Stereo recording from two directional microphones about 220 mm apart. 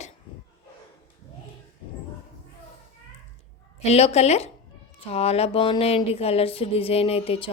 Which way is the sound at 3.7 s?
30° left (ahead or behind).